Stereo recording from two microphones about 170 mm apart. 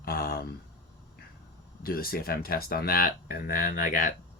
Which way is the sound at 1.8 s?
60° left (ahead or behind).